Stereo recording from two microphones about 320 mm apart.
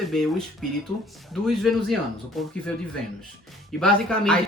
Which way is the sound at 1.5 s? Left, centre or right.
Centre.